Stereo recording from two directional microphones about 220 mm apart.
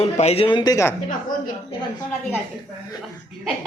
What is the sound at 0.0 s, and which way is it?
Speech, 25° left (ahead or behind).